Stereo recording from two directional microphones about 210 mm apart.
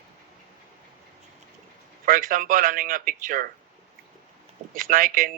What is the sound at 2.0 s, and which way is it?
Speech, 40° right (ahead or behind).